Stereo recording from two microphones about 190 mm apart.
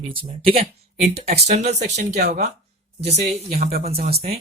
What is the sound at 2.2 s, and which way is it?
Speech, 60° right (ahead or behind).